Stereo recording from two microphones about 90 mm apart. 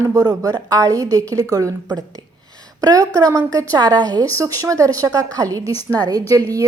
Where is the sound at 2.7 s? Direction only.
40° right (ahead or behind).